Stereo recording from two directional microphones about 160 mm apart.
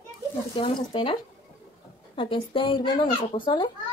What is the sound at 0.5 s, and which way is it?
Speech, 30° left (ahead or behind).